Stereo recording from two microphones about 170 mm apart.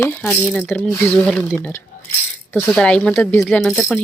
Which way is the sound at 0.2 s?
5° left (ahead or behind).